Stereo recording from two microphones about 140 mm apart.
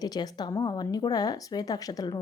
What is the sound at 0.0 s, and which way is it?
Speech, 30° left (ahead or behind).